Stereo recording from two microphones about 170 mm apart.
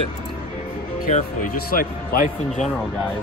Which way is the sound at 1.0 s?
55° left (ahead or behind).